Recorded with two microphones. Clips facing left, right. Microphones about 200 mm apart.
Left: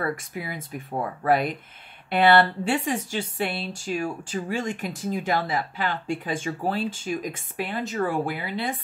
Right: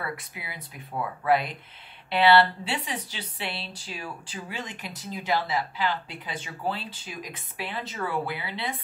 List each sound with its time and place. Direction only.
0.0 s speech: 45° left (ahead or behind)